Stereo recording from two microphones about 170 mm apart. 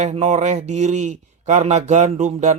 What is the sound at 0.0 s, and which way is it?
Speech, 40° right (ahead or behind).